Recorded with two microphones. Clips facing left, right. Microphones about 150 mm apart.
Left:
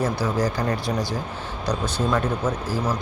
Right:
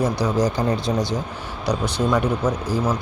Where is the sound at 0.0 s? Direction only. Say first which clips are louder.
Right 3 dB; 20° right (ahead or behind).